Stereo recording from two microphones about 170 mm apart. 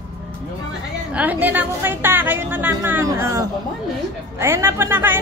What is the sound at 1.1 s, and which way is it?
A woman's voice, 10° right (ahead or behind).